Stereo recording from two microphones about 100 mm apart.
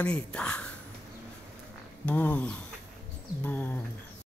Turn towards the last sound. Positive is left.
turn(degrees=20)  # may be behind; listen again after turning